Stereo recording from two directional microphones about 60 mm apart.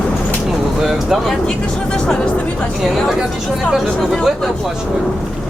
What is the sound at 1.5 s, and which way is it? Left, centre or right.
Speech, centre.